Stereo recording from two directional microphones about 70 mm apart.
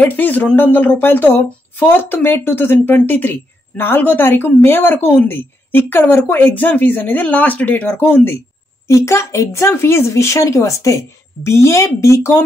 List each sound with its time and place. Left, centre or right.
0.0 s speech: left
8.8 s a woman's voice: left